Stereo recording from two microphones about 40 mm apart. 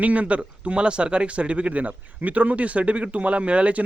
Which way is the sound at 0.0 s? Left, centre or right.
Right.